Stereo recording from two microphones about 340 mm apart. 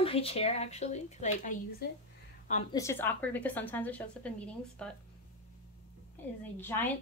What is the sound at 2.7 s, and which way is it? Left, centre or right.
A woman's voice, centre.